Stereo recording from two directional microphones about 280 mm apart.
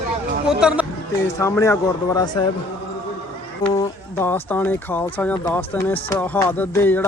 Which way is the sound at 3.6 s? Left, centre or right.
Centre.